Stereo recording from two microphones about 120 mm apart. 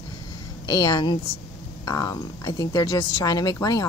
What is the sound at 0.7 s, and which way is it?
Speech, 35° left (ahead or behind).